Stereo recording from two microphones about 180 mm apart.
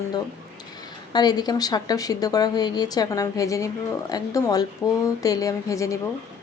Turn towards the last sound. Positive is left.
turn(degrees=15)  # may be behind; listen again after turning